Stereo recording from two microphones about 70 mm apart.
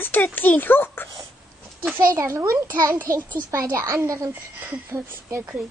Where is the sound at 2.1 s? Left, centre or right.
Right.